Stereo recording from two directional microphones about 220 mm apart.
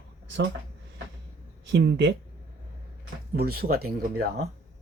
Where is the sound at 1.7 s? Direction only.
55° right (ahead or behind).